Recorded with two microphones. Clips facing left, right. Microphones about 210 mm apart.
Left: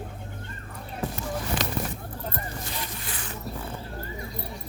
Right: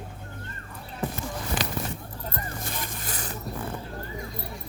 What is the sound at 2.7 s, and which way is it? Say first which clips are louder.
Zipper: right 1 dB; 45° right (ahead or behind).